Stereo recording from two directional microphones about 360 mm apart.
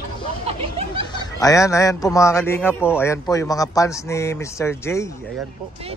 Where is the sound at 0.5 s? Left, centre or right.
Centre.